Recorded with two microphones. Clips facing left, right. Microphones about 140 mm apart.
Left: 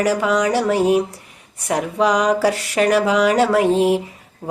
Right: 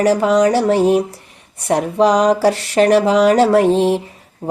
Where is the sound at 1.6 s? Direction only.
30° right (ahead or behind).